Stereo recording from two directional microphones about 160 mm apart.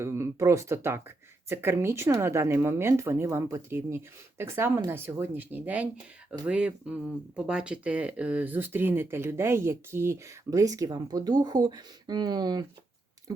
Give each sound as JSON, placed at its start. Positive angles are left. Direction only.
{"t": 0.0, "sound": "speech", "side_deg": -15}